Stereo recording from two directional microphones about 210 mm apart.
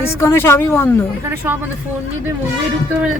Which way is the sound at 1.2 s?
10° right (ahead or behind).